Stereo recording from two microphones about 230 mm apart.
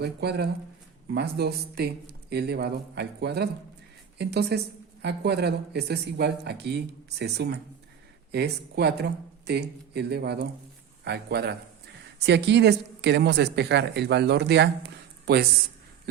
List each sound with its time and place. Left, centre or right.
0.0 s a woman's voice: right